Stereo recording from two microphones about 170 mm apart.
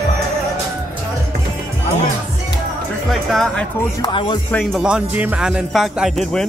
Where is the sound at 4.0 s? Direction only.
25° left (ahead or behind).